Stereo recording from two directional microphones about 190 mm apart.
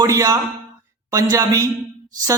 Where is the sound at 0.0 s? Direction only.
20° right (ahead or behind).